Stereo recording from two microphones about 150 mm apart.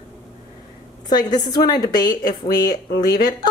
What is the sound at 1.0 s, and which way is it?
Speech, 25° left (ahead or behind).